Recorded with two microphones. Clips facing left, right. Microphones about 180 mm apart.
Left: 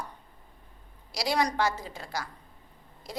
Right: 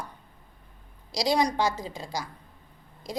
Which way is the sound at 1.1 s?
15° right (ahead or behind).